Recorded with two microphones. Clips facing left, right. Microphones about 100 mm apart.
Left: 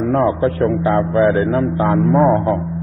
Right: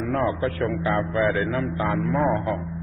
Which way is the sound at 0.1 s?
35° left (ahead or behind).